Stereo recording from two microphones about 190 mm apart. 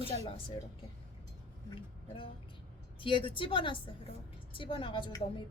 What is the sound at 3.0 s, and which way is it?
A woman's voice, 25° left (ahead or behind).